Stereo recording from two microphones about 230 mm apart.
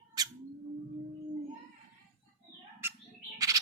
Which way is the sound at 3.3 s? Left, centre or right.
Centre.